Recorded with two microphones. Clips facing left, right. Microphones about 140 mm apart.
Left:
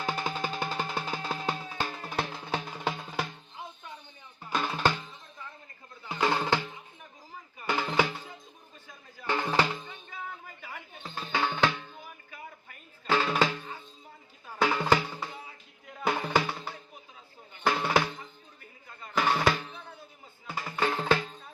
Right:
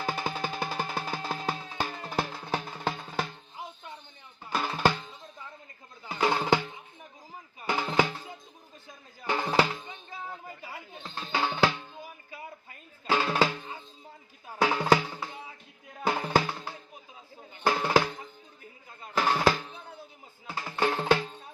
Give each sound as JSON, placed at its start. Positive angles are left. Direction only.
{"t": 0.0, "sound": "music", "side_deg": -5}
{"t": 4.5, "sound": "music", "side_deg": -5}
{"t": 6.1, "sound": "music", "side_deg": -5}
{"t": 9.2, "sound": "music", "side_deg": -10}
{"t": 10.6, "sound": "a sound", "side_deg": -35}
{"t": 11.0, "sound": "music", "side_deg": 0}
{"t": 11.3, "sound": "music", "side_deg": -10}
{"t": 13.1, "sound": "music", "side_deg": -5}
{"t": 19.2, "sound": "drum", "side_deg": -5}
{"t": 20.5, "sound": "music", "side_deg": 0}